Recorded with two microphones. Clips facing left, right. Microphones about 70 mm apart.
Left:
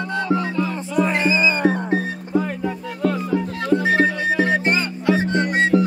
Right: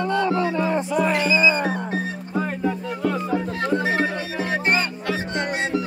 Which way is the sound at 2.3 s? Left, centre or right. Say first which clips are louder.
Left 2 dB; centre.